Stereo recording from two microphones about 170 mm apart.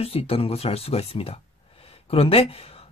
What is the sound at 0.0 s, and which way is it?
Speech, 35° left (ahead or behind).